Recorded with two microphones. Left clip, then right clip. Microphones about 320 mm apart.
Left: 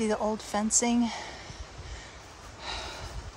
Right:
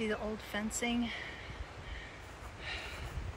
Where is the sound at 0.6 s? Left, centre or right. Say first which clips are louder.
Left 8 dB; left.